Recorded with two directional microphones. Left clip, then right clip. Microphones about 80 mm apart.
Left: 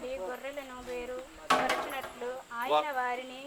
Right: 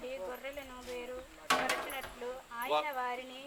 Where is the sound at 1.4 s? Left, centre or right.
Right.